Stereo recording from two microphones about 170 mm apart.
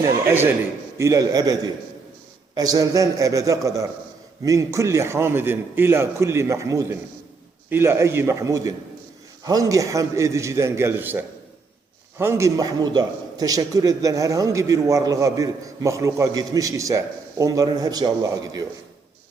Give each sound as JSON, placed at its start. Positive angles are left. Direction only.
{"t": 0.0, "sound": "a man's voice", "side_deg": -15}